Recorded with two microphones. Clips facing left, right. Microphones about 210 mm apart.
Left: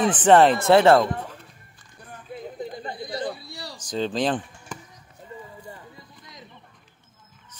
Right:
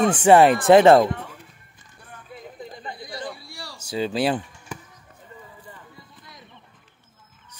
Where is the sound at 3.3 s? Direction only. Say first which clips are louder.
Left 3 dB; 20° left (ahead or behind).